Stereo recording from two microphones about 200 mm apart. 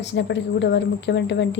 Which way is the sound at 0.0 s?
60° left (ahead or behind).